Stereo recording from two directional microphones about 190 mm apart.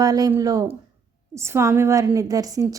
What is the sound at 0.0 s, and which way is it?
A woman's voice, 20° right (ahead or behind).